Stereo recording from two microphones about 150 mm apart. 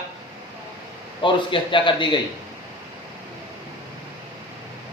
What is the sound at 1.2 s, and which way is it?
A man's voice, 35° left (ahead or behind).